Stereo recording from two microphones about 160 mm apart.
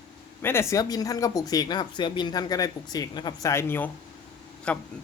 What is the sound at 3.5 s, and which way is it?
A woman's voice, 15° left (ahead or behind).